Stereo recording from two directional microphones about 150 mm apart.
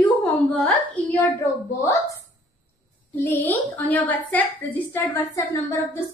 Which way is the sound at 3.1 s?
10° left (ahead or behind).